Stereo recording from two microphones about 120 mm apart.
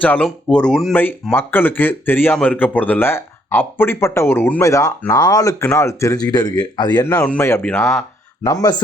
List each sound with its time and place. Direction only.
0.0 s speech: 10° left (ahead or behind)
1.4 s speech: 15° left (ahead or behind)
4.6 s speech: 25° left (ahead or behind)
7.0 s speech: 20° left (ahead or behind)
8.4 s speech: 30° left (ahead or behind)